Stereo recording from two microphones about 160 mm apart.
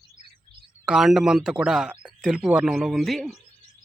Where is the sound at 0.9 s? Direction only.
5° right (ahead or behind).